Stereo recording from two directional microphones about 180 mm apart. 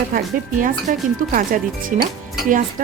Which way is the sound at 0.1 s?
55° right (ahead or behind).